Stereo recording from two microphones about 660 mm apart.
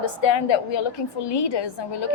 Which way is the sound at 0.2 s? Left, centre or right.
Left.